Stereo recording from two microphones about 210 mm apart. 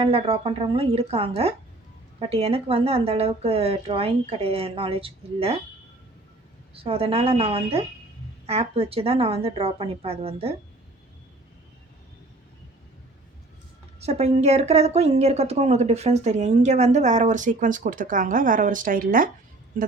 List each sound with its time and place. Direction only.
0.0 s speech: 25° right (ahead or behind)
6.7 s speech: 25° right (ahead or behind)
14.0 s a woman's voice: 30° right (ahead or behind)